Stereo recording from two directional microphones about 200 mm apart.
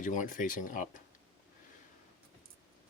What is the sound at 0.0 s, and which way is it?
Speech, 40° left (ahead or behind).